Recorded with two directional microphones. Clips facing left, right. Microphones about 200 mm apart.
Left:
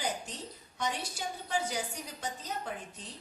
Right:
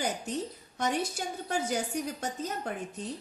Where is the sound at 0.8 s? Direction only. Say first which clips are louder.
Right 5 dB; 45° right (ahead or behind).